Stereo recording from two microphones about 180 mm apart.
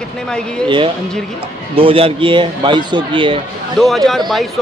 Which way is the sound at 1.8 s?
30° right (ahead or behind).